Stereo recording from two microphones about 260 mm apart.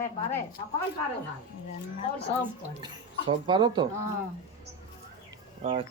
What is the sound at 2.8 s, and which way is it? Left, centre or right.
Speech, centre.